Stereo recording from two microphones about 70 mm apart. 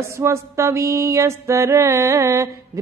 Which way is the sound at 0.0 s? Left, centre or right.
Right.